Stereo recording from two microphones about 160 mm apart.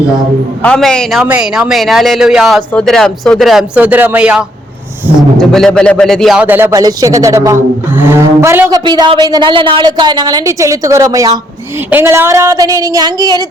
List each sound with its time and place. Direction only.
0.6 s a man's voice: 5° left (ahead or behind); by 5.2 s 15° right (ahead or behind)
5.4 s a man's voice: 5° left (ahead or behind)
6.4 s speech: 10° right (ahead or behind)
8.8 s a woman's voice: 30° right (ahead or behind)